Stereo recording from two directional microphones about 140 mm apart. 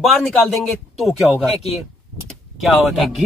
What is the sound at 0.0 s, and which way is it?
Speech, centre (ahead or behind).